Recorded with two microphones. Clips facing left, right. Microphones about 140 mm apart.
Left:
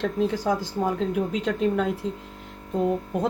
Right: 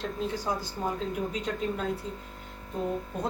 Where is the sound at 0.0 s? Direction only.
90° left.